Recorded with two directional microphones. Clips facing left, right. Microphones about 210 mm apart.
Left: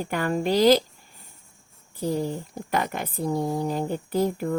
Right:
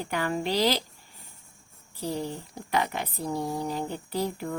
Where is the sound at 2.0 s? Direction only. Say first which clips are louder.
Left 5 dB; 45° left (ahead or behind).